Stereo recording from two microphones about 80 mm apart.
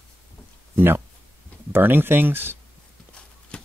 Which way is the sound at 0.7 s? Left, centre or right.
Right.